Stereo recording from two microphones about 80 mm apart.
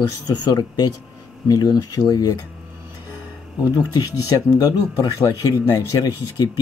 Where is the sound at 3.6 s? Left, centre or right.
Left.